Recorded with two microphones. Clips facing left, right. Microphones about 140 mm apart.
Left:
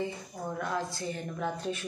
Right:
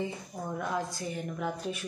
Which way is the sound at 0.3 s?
20° right (ahead or behind).